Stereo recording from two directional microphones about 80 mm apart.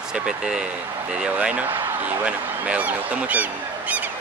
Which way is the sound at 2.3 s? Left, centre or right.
Centre.